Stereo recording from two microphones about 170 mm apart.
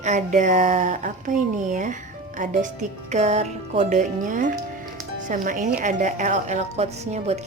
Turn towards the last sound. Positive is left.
turn(degrees=-40)  # may be behind; listen again after turning